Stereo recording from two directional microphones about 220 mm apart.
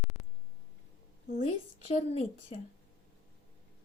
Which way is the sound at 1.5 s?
30° left (ahead or behind).